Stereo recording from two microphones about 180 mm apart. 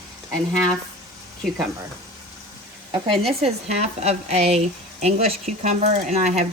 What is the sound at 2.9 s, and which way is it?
Speech, 30° right (ahead or behind).